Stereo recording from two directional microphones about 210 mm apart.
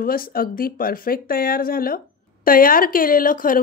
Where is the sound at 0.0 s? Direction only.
45° left (ahead or behind).